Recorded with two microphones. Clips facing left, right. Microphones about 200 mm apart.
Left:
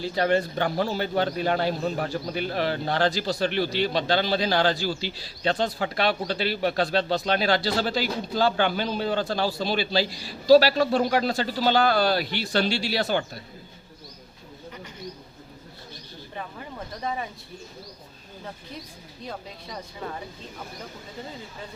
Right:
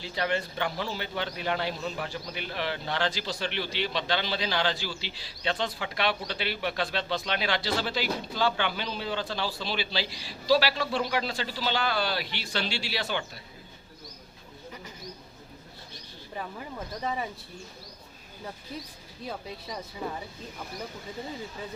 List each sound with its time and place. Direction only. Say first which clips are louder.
0.0 s speech: left 7 dB; 40° left (ahead or behind)